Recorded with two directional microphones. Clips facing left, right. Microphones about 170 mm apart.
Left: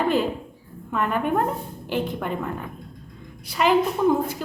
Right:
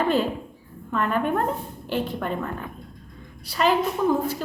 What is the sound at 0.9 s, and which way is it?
A woman's voice, 10° left (ahead or behind).